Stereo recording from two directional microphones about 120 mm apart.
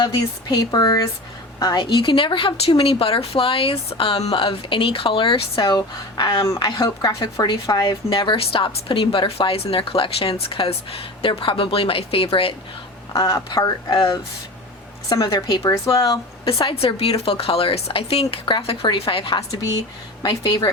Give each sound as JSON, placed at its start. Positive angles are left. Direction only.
{"t": 0.0, "sound": "a woman's voice", "side_deg": 35}
{"t": 13.1, "sound": "speech", "side_deg": 30}
{"t": 16.5, "sound": "a woman's voice", "side_deg": 45}